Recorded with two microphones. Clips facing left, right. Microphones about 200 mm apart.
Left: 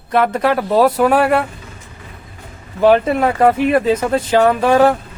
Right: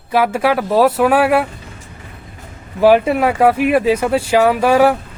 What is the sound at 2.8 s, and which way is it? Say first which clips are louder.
Speech: right 1 dB; 5° right (ahead or behind).